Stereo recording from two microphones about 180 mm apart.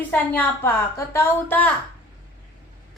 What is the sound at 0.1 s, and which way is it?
A woman's voice, 10° left (ahead or behind).